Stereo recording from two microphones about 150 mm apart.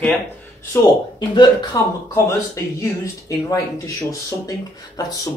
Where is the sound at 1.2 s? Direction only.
25° left (ahead or behind).